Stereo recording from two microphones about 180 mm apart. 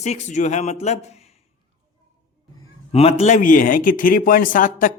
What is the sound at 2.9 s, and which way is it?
A man's voice, 35° left (ahead or behind).